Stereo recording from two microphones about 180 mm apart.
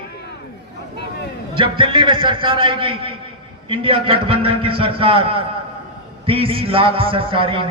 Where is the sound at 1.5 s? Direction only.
30° right (ahead or behind).